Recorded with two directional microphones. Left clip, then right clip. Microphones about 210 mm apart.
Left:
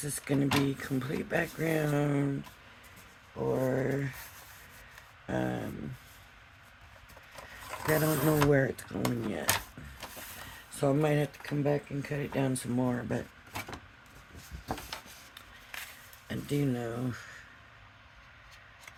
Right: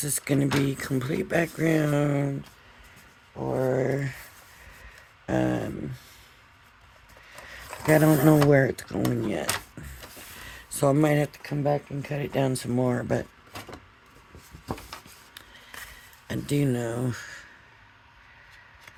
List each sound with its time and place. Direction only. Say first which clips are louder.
0.0 s speech: right 5 dB; 45° right (ahead or behind)
3.6 s speech: right 5 dB; 40° right (ahead or behind)
5.2 s speech: right 8 dB; 40° right (ahead or behind)
7.9 s speech: right 9 dB; 40° right (ahead or behind)
10.8 s speech: right 6 dB; 45° right (ahead or behind)
16.2 s speech: right 6 dB; 45° right (ahead or behind)